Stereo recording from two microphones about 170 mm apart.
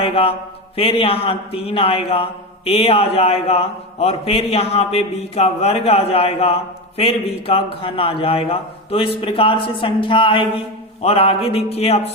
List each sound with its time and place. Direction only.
0.0 s mantra: 35° left (ahead or behind)
0.8 s speech: 35° left (ahead or behind)